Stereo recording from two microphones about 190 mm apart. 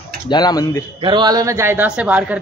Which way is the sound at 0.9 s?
25° right (ahead or behind).